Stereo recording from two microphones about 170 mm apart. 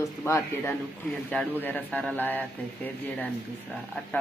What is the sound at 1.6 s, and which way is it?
Speech, 10° left (ahead or behind).